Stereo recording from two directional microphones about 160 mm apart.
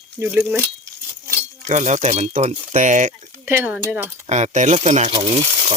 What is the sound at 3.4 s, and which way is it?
Speech, 15° right (ahead or behind).